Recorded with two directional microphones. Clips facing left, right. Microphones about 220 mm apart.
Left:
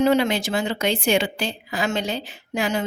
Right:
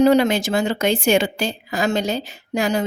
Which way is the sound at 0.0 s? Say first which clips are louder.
Right 4 dB; 40° right (ahead or behind).